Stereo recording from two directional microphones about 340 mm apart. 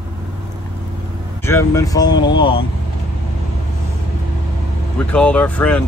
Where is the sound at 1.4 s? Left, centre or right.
Centre.